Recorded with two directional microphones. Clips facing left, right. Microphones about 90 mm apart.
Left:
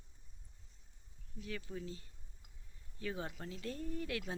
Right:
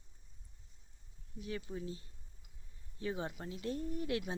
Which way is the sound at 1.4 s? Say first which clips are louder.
Right 3 dB; 25° right (ahead or behind).